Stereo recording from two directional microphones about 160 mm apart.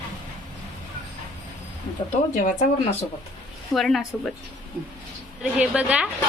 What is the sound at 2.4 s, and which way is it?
Speech, 55° left (ahead or behind).